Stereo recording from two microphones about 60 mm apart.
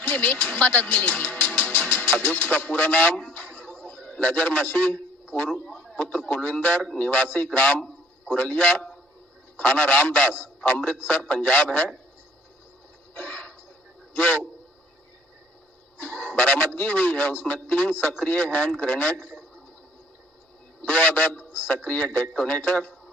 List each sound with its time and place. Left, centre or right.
0.0 s speech: left
3.3 s a sound: left
3.8 s a man's voice: left
6.8 s a man's voice: centre
7.1 s a man's voice: left
13.1 s a sound: left
14.1 s a man's voice: left
16.0 s speech: left
20.8 s a man's voice: left